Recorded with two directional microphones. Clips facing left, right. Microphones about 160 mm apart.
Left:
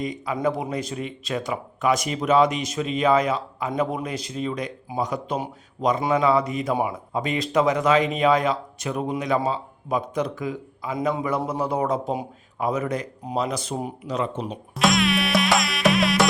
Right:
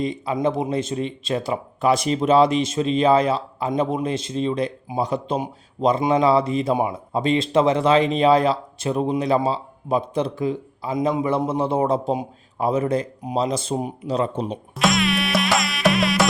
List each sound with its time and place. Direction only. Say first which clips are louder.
0.0 s a man's voice: right 3 dB; 30° right (ahead or behind)
14.8 s insect: even; centre (ahead or behind)